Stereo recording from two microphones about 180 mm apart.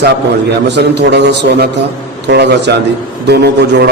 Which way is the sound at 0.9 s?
70° right (ahead or behind).